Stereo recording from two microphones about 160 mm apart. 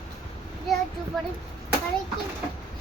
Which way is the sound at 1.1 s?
Centre (ahead or behind).